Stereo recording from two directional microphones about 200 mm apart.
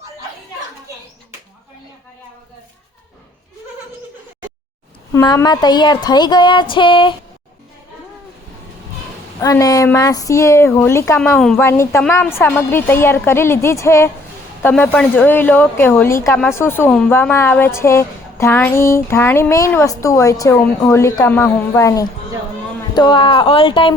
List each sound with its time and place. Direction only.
5.1 s a woman's voice: 15° left (ahead or behind)
9.4 s speech: 15° left (ahead or behind)
11.3 s a woman's voice: centre (ahead or behind)
11.6 s a woman's voice: 15° left (ahead or behind)